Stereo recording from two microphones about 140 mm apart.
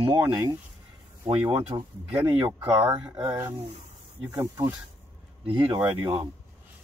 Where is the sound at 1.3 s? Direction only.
45° right (ahead or behind).